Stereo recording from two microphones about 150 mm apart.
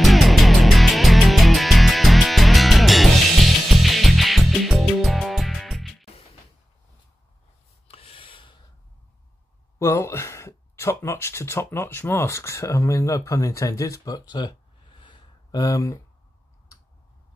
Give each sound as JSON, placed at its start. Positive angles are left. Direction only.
{"t": 0.0, "sound": "music", "side_deg": 0}
{"t": 7.9, "sound": "rub", "side_deg": 40}
{"t": 9.8, "sound": "speech", "side_deg": 20}